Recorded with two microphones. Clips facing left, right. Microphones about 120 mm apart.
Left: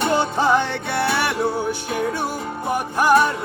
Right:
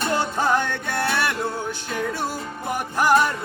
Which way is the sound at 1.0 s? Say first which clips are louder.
Left 3 dB; 10° left (ahead or behind).